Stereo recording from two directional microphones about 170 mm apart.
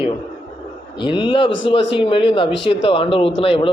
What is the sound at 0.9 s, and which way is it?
Speech, 30° left (ahead or behind).